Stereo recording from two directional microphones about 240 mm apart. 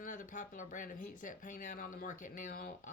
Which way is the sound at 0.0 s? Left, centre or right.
Left.